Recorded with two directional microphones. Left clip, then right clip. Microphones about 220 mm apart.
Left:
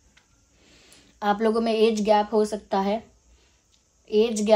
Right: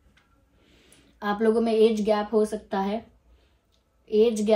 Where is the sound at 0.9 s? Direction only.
35° left (ahead or behind).